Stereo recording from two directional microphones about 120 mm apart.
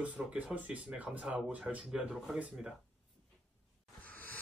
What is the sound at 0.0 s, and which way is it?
Speech, 10° right (ahead or behind).